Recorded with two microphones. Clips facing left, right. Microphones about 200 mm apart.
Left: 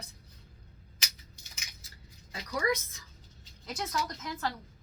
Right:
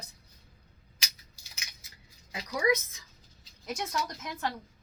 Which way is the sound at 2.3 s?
15° right (ahead or behind).